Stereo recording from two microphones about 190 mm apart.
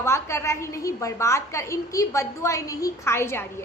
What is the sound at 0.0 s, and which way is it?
A woman's voice, 15° left (ahead or behind).